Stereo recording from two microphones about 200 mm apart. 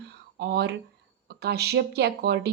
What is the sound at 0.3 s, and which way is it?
A woman's voice, 55° right (ahead or behind).